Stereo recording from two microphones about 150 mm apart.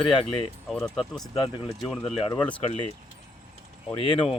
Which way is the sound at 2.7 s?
40° left (ahead or behind).